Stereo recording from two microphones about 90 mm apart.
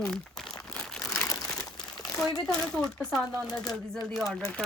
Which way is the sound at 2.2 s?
5° left (ahead or behind).